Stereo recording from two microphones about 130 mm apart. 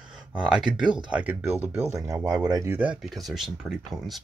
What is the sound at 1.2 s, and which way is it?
Speech, 15° right (ahead or behind).